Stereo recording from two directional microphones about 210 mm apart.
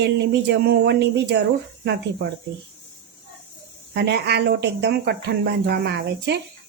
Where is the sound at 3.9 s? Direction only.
50° right (ahead or behind).